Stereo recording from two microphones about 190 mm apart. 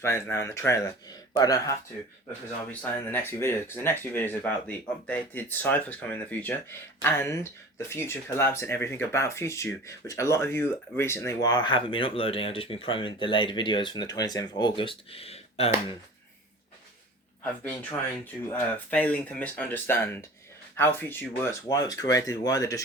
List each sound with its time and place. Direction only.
0.0 s speech: 10° left (ahead or behind)
3.1 s speech: 10° left (ahead or behind); by 16.0 s 30° left (ahead or behind)
18.5 s speech: 10° left (ahead or behind)